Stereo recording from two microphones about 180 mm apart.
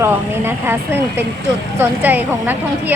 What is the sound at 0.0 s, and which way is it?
Speech, 10° right (ahead or behind).